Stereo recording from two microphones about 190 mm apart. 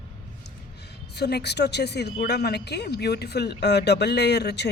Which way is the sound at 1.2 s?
60° left (ahead or behind).